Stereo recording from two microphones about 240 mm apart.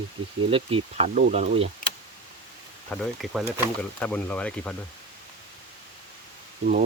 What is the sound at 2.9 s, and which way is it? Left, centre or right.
Speech, centre.